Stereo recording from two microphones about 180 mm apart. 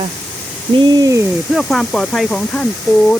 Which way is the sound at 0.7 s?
25° right (ahead or behind).